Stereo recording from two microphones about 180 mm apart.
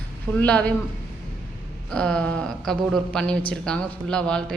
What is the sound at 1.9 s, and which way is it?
A man's voice, 5° left (ahead or behind).